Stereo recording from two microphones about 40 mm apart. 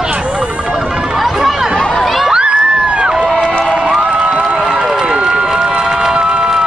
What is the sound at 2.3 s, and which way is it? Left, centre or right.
Crowd, right.